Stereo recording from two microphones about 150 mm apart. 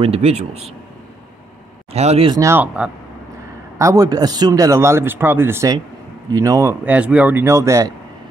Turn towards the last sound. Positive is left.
turn(degrees=-20)  # may be behind; listen again after turning